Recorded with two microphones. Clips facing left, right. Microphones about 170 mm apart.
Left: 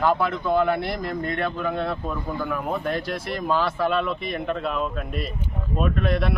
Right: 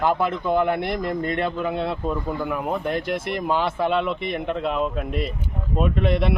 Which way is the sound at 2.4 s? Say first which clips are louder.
Right 1 dB; 15° right (ahead or behind).